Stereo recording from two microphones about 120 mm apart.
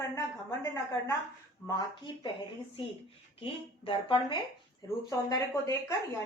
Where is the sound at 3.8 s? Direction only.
45° left (ahead or behind).